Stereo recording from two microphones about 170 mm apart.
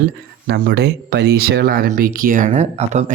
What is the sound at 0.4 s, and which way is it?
Speech, 65° right (ahead or behind).